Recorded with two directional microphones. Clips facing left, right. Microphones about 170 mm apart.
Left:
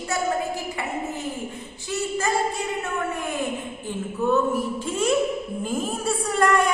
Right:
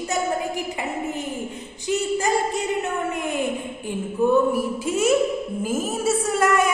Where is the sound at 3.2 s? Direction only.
15° right (ahead or behind).